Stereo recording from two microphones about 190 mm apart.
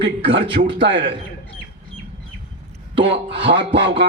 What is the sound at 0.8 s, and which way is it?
Speech, 70° right (ahead or behind).